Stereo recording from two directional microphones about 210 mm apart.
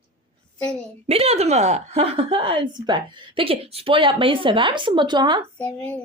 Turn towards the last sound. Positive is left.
turn(degrees=10)  # may be behind; listen again after turning